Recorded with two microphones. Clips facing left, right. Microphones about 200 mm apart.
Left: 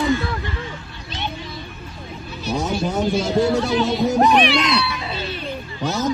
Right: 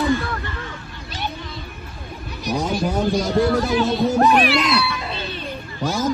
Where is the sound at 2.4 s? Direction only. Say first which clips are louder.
Even; 15° right (ahead or behind).